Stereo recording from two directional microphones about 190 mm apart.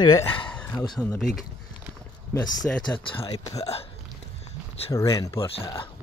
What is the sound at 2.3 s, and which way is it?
Speech, 20° left (ahead or behind).